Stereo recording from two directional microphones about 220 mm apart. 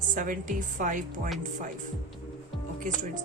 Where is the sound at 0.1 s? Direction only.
35° right (ahead or behind).